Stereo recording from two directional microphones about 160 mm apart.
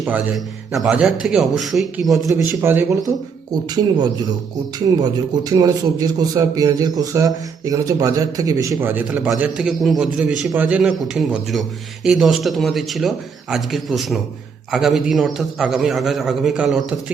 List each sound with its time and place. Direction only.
0.0 s a man's voice: 10° right (ahead or behind)
2.2 s speech: 15° right (ahead or behind)
3.5 s a man's voice: 25° right (ahead or behind); by 16.8 s centre (ahead or behind)